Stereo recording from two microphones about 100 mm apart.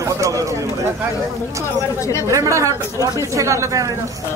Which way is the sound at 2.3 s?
30° right (ahead or behind).